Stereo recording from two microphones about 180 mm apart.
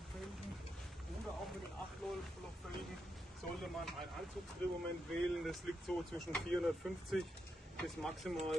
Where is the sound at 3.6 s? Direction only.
Centre (ahead or behind).